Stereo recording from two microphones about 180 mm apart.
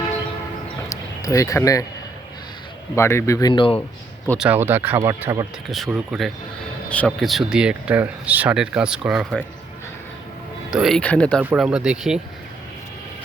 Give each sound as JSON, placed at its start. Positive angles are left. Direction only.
{"t": 0.9, "sound": "speech", "side_deg": 15}
{"t": 2.9, "sound": "speech", "side_deg": 15}
{"t": 4.4, "sound": "speech", "side_deg": -10}
{"t": 5.6, "sound": "speech", "side_deg": 0}
{"t": 10.7, "sound": "speech", "side_deg": 0}
{"t": 11.3, "sound": "speech", "side_deg": -5}